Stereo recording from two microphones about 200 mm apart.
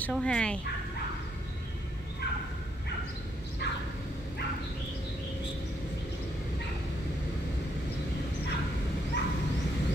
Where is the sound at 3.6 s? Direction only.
55° left (ahead or behind).